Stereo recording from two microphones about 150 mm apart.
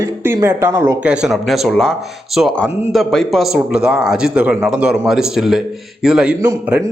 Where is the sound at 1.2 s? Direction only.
Centre (ahead or behind).